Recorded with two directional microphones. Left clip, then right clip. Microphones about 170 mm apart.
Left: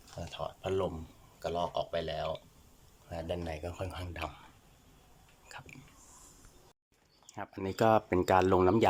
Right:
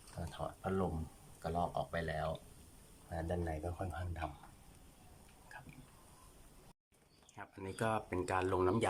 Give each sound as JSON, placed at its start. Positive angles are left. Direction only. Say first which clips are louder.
{"t": 0.3, "sound": "a sound", "louder": "left 5 dB", "side_deg": 10}
{"t": 1.4, "sound": "speech", "louder": "left 4 dB", "side_deg": 10}
{"t": 7.3, "sound": "speech", "louder": "left 10 dB", "side_deg": 25}